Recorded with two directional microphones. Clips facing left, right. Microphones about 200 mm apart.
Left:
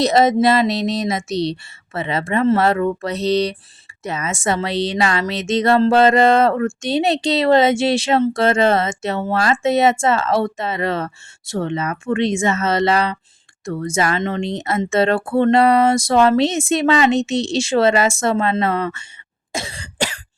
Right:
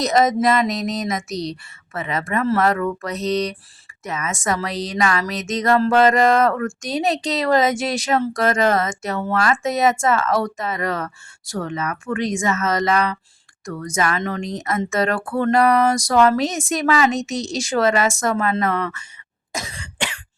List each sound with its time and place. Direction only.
0.0 s a woman's voice: 30° left (ahead or behind)
19.5 s cough: 30° left (ahead or behind)